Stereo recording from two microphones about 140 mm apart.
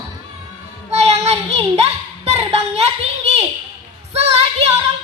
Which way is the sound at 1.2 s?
50° right (ahead or behind).